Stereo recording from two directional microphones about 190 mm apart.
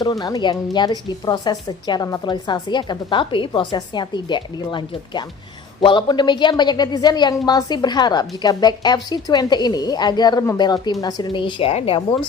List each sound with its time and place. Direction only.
0.0 s a woman's voice: 20° left (ahead or behind)